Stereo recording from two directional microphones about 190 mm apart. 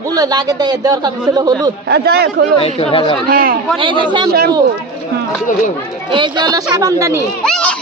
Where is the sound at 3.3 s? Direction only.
50° right (ahead or behind).